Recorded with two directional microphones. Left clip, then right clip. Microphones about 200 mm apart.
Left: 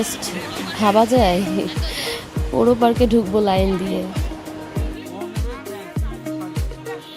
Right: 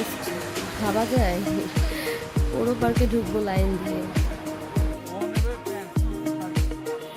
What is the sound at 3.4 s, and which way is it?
Speech, 35° left (ahead or behind).